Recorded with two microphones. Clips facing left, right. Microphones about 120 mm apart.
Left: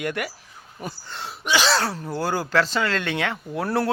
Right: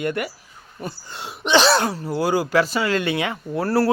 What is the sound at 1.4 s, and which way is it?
Cough, 25° right (ahead or behind).